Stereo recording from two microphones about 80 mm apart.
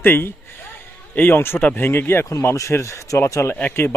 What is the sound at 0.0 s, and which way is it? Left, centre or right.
Speech, left.